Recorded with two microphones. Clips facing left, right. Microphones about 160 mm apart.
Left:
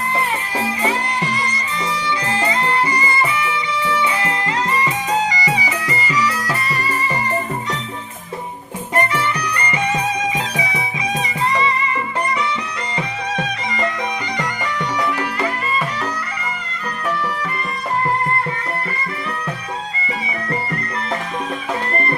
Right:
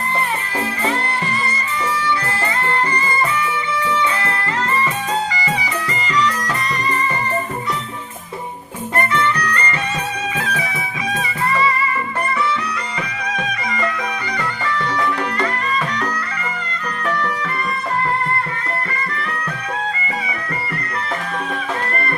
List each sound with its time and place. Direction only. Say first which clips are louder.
0.6 s music: left 1 dB; 15° left (ahead or behind)
9.0 s music: right 1 dB; 15° left (ahead or behind)
13.3 s music: right 1 dB; 25° left (ahead or behind)